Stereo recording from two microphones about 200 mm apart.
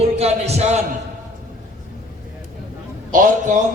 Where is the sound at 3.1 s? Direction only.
40° right (ahead or behind).